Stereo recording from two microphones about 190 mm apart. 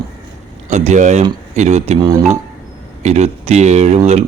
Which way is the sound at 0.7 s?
40° right (ahead or behind).